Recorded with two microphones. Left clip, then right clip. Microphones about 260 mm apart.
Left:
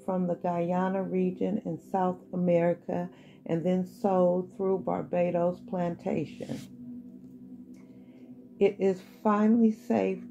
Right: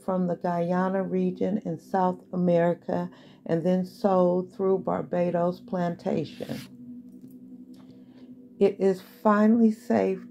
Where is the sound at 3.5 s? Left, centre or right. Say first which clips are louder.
Right 4 dB; right.